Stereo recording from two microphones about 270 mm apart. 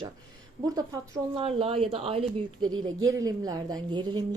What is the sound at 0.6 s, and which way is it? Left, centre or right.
A woman's voice, centre.